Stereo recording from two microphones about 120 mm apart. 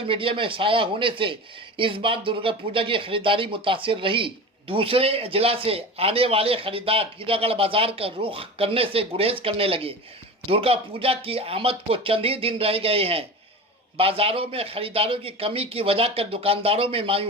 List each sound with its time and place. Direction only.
0.1 s speech: 45° right (ahead or behind)